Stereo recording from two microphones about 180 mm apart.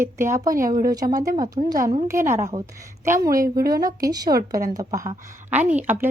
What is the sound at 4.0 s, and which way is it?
A woman's voice, 20° right (ahead or behind).